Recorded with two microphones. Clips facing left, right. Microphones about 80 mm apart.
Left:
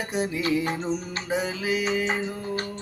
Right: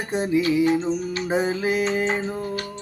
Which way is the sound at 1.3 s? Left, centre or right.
Right.